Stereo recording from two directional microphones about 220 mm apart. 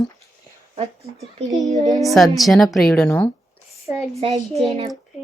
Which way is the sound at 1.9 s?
Centre (ahead or behind).